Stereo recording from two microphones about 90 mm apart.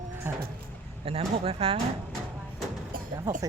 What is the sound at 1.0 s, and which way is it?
Speech, 90° right.